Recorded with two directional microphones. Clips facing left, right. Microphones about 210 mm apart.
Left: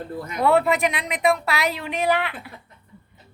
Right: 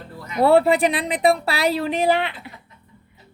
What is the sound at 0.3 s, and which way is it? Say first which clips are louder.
Speech: right 4 dB; 35° right (ahead or behind).